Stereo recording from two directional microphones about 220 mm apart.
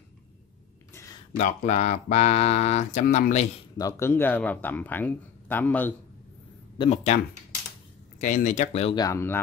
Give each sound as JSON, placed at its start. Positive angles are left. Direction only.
{"t": 1.3, "sound": "speech", "side_deg": 30}
{"t": 3.7, "sound": "speech", "side_deg": 15}
{"t": 6.8, "sound": "speech", "side_deg": 30}
{"t": 8.2, "sound": "speech", "side_deg": 35}